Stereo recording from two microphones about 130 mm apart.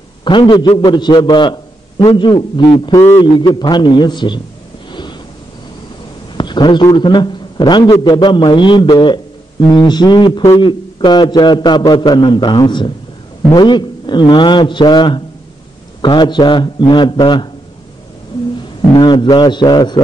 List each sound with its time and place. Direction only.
0.2 s a man's voice: 35° left (ahead or behind)
6.3 s a man's voice: 35° left (ahead or behind)
18.9 s a man's voice: 35° left (ahead or behind)